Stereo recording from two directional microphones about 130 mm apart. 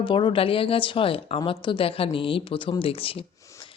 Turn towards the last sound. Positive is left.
turn(degrees=45)  # may be behind; listen again after turning